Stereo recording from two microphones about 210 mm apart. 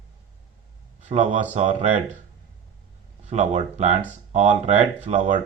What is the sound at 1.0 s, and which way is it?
Speech, 35° right (ahead or behind).